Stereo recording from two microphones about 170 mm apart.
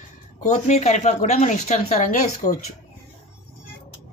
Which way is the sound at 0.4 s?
45° left (ahead or behind).